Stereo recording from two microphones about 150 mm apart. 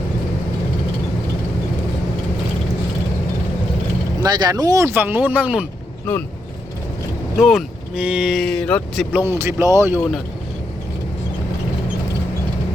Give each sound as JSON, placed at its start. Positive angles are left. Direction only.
{"t": 4.2, "sound": "speech", "side_deg": -25}
{"t": 7.4, "sound": "speech", "side_deg": -5}
{"t": 9.1, "sound": "speech", "side_deg": -15}